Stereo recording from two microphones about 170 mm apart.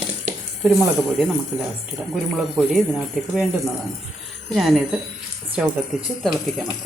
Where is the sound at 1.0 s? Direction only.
Centre (ahead or behind).